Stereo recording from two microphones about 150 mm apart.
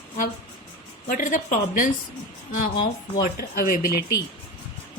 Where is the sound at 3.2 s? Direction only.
75° left (ahead or behind).